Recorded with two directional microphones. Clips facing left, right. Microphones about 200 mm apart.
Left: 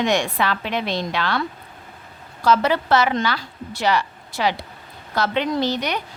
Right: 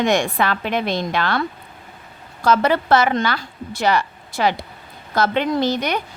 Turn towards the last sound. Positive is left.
turn(degrees=-50)  # may be behind; listen again after turning